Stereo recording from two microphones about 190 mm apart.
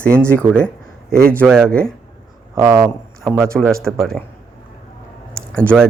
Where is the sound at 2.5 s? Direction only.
15° right (ahead or behind).